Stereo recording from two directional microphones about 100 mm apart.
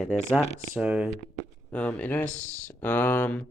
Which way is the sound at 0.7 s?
10° right (ahead or behind).